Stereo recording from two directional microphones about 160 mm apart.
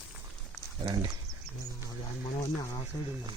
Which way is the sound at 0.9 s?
25° right (ahead or behind).